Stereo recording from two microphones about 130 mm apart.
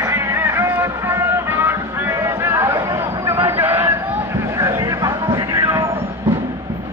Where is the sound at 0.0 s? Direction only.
20° right (ahead or behind).